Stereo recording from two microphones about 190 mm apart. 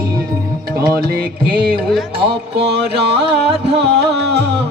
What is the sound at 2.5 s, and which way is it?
Music, 60° right (ahead or behind).